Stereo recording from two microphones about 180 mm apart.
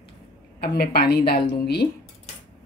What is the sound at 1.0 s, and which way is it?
Speech, 60° left (ahead or behind).